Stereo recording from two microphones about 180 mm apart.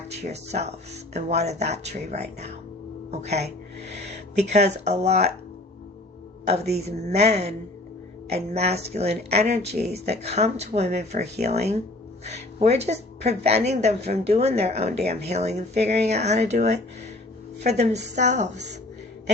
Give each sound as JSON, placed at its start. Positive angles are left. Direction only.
{"t": 0.1, "sound": "speech", "side_deg": -35}
{"t": 6.7, "sound": "speech", "side_deg": -35}